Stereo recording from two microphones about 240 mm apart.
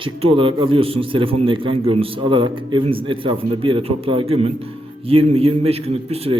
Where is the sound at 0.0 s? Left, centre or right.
Right.